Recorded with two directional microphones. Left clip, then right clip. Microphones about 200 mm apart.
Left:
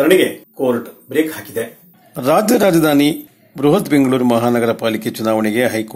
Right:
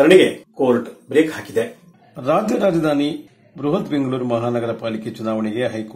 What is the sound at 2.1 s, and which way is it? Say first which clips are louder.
Speech: left 5 dB; 25° left (ahead or behind).